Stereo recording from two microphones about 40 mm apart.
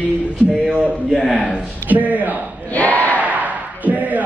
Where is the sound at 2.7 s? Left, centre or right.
Left.